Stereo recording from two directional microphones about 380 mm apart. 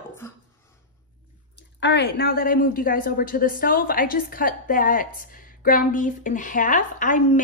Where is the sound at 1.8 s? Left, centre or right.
Left.